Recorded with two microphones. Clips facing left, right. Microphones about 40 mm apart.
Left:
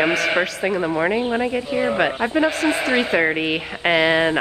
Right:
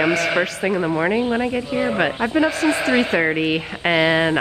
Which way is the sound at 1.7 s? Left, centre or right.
Left.